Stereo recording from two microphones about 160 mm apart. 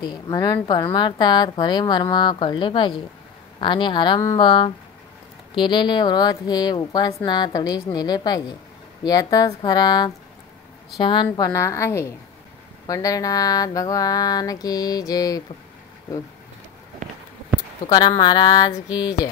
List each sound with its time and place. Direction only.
0.0 s a woman's voice: 25° left (ahead or behind)
17.8 s a woman's voice: 25° left (ahead or behind)